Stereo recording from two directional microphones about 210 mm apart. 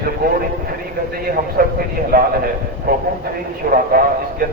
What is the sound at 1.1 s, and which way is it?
A man's voice, 45° right (ahead or behind).